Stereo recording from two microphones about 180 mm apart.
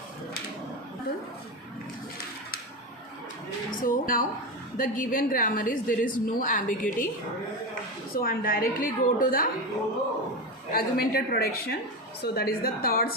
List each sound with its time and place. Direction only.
3.7 s a woman's voice: 50° left (ahead or behind)
8.1 s a woman's voice: 55° left (ahead or behind)
10.7 s a woman's voice: 55° left (ahead or behind)